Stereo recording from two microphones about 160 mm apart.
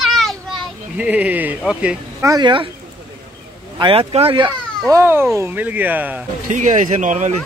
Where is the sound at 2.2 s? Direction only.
25° right (ahead or behind).